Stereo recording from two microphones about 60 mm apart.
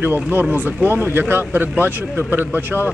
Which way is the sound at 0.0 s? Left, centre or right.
Right.